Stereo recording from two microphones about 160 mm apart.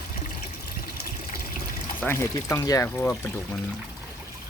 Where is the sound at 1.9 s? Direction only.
15° left (ahead or behind).